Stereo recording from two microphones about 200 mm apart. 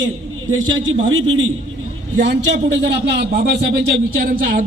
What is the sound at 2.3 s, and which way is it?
A man's voice, 60° right (ahead or behind).